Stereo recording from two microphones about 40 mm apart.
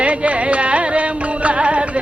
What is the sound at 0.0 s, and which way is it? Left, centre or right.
Music, right.